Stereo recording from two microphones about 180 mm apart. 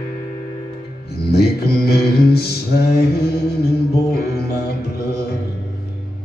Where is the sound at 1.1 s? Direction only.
60° left (ahead or behind).